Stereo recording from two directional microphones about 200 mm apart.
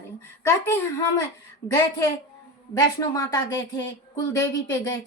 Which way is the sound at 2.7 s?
15° left (ahead or behind).